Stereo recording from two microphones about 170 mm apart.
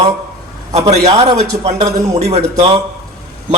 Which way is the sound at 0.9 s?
40° right (ahead or behind).